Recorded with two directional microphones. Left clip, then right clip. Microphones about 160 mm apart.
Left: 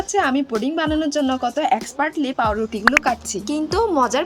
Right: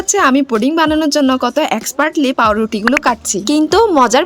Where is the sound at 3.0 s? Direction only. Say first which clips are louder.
Right 7 dB; 65° right (ahead or behind).